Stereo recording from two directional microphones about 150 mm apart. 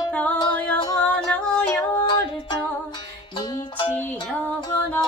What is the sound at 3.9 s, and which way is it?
Music, 10° left (ahead or behind).